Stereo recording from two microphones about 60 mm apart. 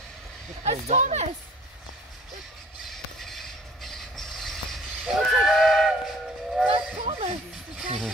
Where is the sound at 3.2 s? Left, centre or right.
Centre.